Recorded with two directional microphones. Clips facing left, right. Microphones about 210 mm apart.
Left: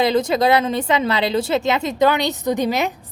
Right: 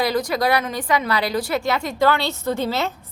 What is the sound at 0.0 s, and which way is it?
A woman's voice, 25° left (ahead or behind).